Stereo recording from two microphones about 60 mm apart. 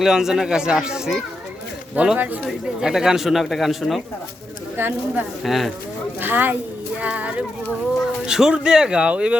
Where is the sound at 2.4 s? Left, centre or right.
Centre.